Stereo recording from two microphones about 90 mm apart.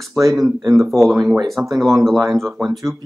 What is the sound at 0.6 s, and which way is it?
Speech, 35° right (ahead or behind).